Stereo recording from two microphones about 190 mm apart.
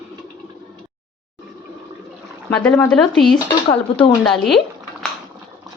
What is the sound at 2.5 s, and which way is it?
Speech, 5° left (ahead or behind).